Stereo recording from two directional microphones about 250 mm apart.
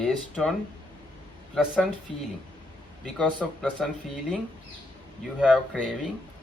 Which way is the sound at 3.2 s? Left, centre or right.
Centre.